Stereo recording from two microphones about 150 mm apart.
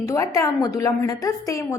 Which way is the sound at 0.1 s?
20° left (ahead or behind).